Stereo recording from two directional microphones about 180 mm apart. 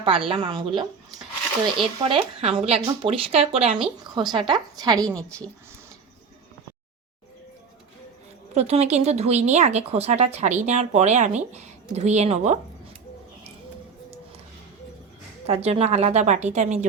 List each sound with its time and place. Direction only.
0.0 s a woman's voice: 30° right (ahead or behind)
2.0 s a woman's voice: 30° right (ahead or behind)
4.0 s a woman's voice: 25° right (ahead or behind)
8.5 s a woman's voice: 35° right (ahead or behind)
15.4 s a woman's voice: 35° right (ahead or behind)